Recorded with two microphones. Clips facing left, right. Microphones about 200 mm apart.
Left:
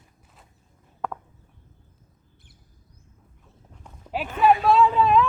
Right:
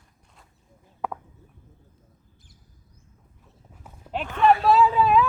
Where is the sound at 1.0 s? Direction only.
5° right (ahead or behind).